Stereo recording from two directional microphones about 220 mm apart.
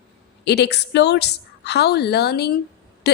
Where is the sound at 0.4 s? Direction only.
50° left (ahead or behind).